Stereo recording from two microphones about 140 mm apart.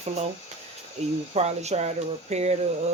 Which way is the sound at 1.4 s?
50° right (ahead or behind).